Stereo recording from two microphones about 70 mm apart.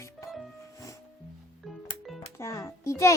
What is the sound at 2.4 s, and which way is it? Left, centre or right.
Speech, left.